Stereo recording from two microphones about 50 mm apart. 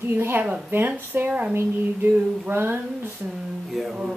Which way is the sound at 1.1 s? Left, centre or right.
Right.